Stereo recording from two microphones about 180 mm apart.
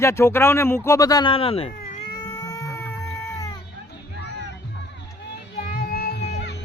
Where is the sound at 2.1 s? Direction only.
25° left (ahead or behind).